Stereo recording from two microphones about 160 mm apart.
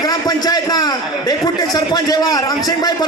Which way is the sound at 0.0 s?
25° left (ahead or behind).